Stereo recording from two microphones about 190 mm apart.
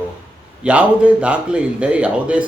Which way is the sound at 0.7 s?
5° right (ahead or behind).